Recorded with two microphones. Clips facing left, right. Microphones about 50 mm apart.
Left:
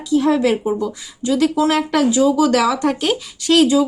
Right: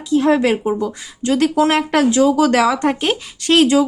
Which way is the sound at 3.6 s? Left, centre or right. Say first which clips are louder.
Right 1 dB; right.